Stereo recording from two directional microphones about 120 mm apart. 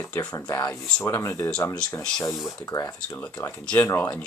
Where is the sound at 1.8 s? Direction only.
35° left (ahead or behind).